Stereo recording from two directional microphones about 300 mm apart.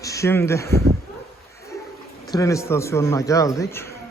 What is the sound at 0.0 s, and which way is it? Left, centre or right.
Speech, centre.